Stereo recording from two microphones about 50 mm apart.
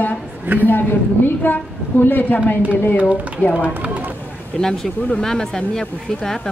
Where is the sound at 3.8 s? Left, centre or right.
Right.